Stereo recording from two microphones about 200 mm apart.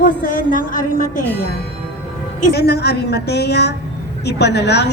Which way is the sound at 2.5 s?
55° left (ahead or behind).